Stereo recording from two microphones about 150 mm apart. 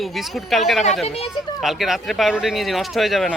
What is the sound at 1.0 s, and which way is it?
Speech, 40° left (ahead or behind).